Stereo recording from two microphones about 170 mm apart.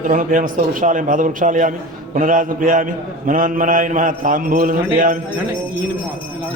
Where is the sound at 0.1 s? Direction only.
50° right (ahead or behind).